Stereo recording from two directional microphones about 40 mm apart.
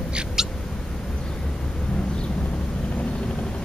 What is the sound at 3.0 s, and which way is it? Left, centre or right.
Vehicle, left.